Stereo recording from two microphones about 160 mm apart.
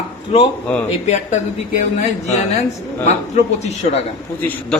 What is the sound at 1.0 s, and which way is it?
Speech, 45° left (ahead or behind).